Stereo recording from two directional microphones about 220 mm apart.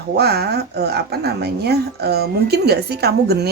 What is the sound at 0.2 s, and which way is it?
Speech, 45° right (ahead or behind).